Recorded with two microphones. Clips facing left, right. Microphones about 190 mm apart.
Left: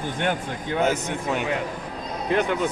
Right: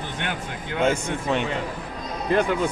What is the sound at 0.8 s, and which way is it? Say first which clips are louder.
Speech: right 2 dB; 5° left (ahead or behind).